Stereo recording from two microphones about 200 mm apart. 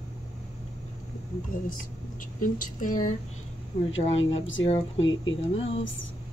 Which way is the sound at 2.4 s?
40° left (ahead or behind).